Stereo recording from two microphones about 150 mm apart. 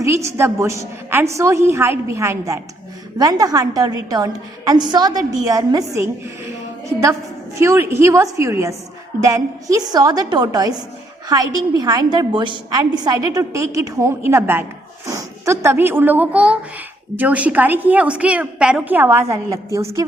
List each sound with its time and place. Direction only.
0.0 s a woman's voice: 20° right (ahead or behind)
7.6 s a woman's voice: 15° right (ahead or behind)